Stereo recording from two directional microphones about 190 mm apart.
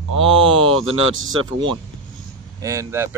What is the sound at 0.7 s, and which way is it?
Speech, 90° right.